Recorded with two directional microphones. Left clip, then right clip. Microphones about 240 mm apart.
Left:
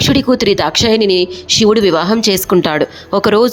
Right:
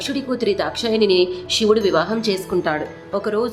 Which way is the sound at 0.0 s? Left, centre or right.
Left.